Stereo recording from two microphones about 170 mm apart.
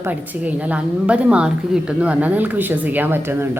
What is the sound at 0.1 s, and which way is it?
A woman's voice, 10° right (ahead or behind).